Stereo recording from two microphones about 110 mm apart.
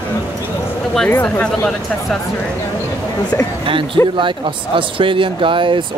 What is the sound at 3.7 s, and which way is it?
Speech, 50° right (ahead or behind).